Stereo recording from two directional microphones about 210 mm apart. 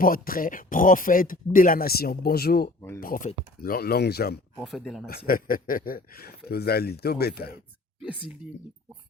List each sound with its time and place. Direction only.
0.0 s speech: 40° left (ahead or behind)
4.6 s speech: centre (ahead or behind)
5.0 s speech: 45° left (ahead or behind)